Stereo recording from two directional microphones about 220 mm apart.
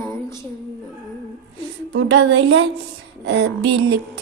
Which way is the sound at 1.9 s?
60° right (ahead or behind).